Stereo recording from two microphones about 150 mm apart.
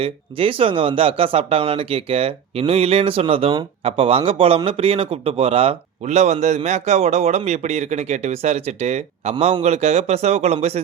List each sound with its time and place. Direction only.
0.0 s a man's voice: 40° right (ahead or behind)